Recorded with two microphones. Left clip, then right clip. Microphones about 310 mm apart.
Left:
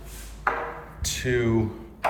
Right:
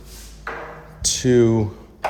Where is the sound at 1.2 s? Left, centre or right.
Centre.